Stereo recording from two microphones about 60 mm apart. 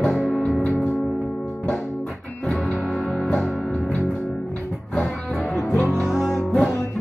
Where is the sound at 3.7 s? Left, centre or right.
Centre.